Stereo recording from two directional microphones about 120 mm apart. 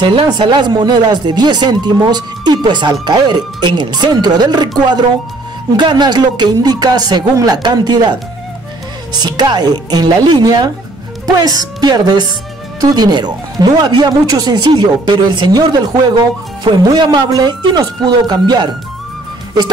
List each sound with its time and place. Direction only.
0.0 s speech: 40° right (ahead or behind)
9.1 s speech: 35° right (ahead or behind)